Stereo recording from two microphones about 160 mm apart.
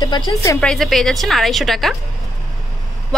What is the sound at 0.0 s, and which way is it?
Speech, 25° left (ahead or behind).